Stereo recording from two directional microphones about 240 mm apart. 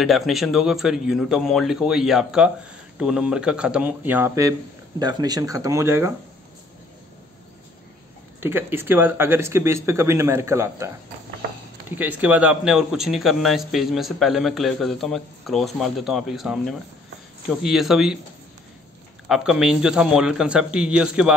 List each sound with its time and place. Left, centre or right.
0.0 s a man's voice: centre
8.4 s speech: centre
12.0 s a man's voice: centre
19.2 s a man's voice: centre